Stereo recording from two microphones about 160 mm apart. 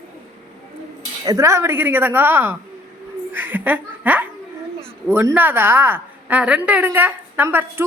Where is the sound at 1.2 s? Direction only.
20° right (ahead or behind).